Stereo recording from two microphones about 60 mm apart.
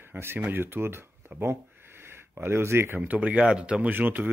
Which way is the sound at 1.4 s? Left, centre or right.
Right.